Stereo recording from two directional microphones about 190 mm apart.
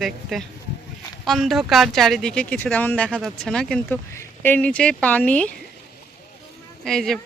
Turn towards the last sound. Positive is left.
turn(degrees=0)  # may be behind; listen again after turning